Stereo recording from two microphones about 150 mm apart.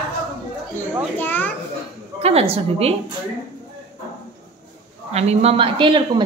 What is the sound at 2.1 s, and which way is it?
Speech, 45° right (ahead or behind).